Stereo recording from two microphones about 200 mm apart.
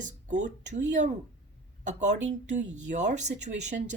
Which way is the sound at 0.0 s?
40° right (ahead or behind).